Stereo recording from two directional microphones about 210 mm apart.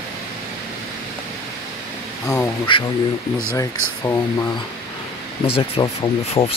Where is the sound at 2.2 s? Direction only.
15° left (ahead or behind).